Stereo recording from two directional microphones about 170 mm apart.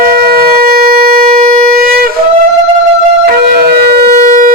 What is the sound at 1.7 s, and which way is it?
Wind instrument, 60° right (ahead or behind).